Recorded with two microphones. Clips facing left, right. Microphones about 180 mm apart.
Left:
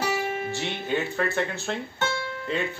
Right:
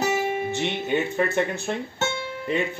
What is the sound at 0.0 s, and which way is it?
Speech, 20° right (ahead or behind).